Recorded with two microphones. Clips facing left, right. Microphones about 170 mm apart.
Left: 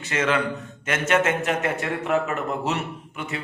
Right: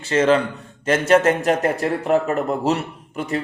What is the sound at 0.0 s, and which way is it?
A man's voice, 30° right (ahead or behind).